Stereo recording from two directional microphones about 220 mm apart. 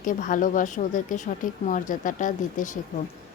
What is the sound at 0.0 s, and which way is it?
Speech, 35° left (ahead or behind).